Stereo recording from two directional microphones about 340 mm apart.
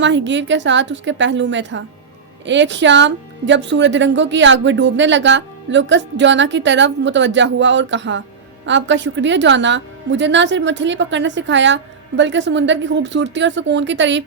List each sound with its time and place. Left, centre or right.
0.0 s speech: right